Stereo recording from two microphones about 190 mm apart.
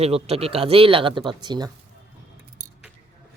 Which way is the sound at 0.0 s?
30° right (ahead or behind).